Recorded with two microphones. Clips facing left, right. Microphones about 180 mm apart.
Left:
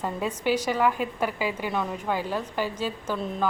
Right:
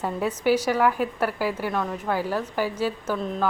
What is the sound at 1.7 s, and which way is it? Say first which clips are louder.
Speech: right 1 dB; 5° left (ahead or behind).